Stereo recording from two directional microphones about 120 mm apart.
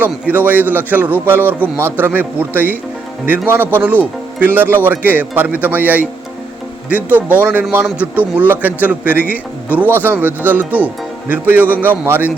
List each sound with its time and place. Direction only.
0.0 s a man's voice: 15° right (ahead or behind)